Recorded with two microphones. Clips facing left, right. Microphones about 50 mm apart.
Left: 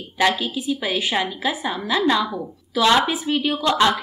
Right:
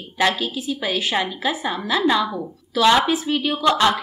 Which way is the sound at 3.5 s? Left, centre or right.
Right.